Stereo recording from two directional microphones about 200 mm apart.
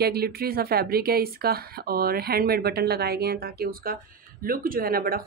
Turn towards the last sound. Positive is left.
turn(degrees=-50)  # may be behind; listen again after turning